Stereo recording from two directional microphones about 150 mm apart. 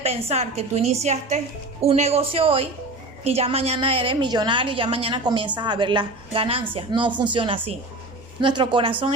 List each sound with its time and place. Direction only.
0.0 s a woman's voice: 45° right (ahead or behind)